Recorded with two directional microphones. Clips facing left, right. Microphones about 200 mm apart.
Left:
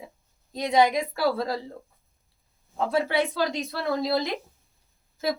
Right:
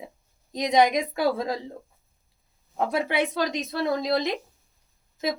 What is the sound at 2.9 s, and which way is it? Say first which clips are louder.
A woman's voice: left 2 dB; 20° right (ahead or behind).